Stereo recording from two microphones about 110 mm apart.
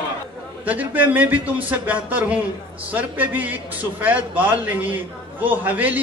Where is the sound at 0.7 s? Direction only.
15° right (ahead or behind).